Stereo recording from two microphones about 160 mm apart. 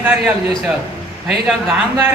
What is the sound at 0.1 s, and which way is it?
A man's voice, 5° right (ahead or behind).